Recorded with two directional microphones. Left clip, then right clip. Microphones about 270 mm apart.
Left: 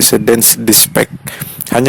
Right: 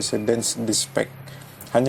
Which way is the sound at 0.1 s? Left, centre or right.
Left.